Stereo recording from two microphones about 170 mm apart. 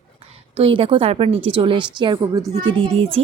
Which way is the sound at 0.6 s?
35° right (ahead or behind).